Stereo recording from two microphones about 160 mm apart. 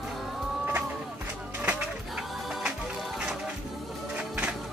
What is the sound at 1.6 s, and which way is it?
Music, 5° right (ahead or behind).